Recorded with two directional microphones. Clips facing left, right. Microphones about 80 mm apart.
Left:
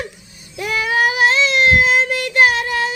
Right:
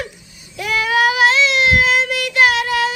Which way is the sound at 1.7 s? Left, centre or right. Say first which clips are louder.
Left 1 dB; left.